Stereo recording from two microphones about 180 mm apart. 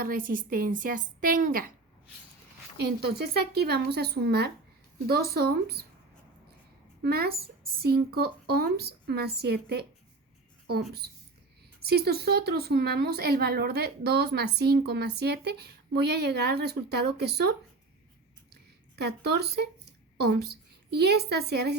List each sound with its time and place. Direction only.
0.0 s speech: 50° right (ahead or behind)
2.8 s speech: 65° right (ahead or behind)
7.0 s speech: 60° right (ahead or behind)
11.0 s speech: 60° right (ahead or behind)
18.5 s a sound: 65° right (ahead or behind)
20.1 s a woman's voice: 60° right (ahead or behind)